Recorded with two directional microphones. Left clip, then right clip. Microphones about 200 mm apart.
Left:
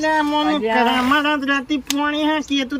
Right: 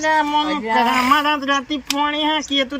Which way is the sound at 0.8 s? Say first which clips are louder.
Right 4 dB; 20° left (ahead or behind).